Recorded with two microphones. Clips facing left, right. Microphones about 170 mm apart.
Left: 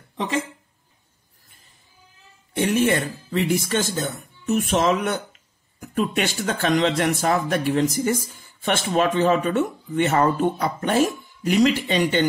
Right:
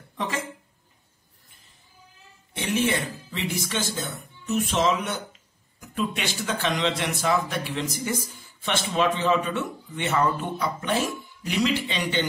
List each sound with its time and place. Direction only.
2.5 s speech: 50° left (ahead or behind)